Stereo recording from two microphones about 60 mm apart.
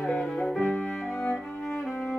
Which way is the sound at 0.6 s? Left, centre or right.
Left.